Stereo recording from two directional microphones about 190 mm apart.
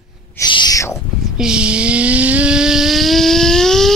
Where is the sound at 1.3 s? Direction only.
5° right (ahead or behind).